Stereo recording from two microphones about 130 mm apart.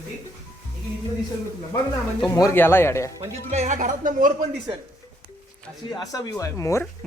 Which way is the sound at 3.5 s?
65° right (ahead or behind).